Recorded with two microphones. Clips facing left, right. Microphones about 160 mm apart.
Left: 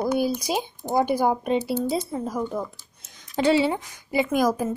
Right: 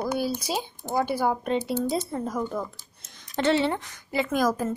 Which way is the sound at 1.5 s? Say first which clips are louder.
Left 2 dB; 5° left (ahead or behind).